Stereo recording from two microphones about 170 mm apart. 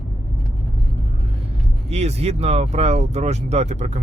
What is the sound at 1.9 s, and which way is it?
Speech, 40° right (ahead or behind).